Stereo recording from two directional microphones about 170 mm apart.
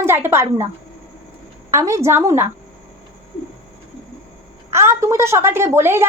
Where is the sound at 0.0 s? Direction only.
15° right (ahead or behind).